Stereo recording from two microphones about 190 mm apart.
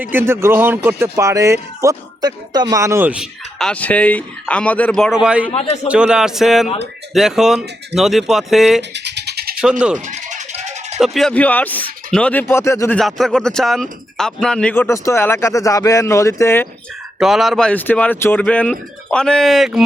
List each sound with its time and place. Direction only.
0.0 s speech: 10° right (ahead or behind)
8.9 s a sound: 65° right (ahead or behind)
10.1 s music: 40° right (ahead or behind)
11.0 s speech: centre (ahead or behind)
13.0 s speech: centre (ahead or behind)
17.2 s speech: centre (ahead or behind)